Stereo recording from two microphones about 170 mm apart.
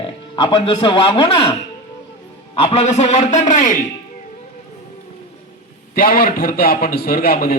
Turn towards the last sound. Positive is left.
turn(degrees=60)  # may be behind; listen again after turning